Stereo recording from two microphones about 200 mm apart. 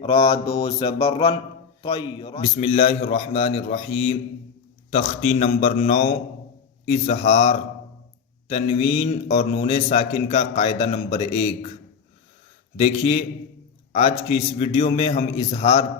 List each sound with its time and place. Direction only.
0.2 s mantra: 20° left (ahead or behind)
2.4 s a man's voice: 35° left (ahead or behind)
12.7 s a man's voice: 30° left (ahead or behind)